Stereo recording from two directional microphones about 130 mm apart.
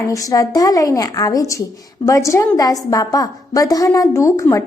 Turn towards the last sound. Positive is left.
turn(degrees=25)  # may be behind; listen again after turning